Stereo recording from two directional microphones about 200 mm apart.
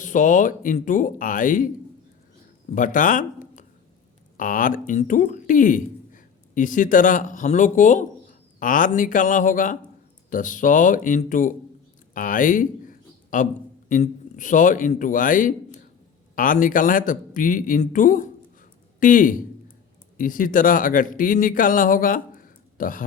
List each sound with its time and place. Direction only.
0.0 s a man's voice: 40° left (ahead or behind)